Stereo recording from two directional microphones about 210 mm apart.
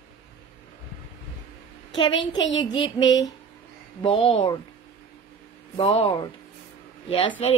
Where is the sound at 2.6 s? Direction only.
20° left (ahead or behind).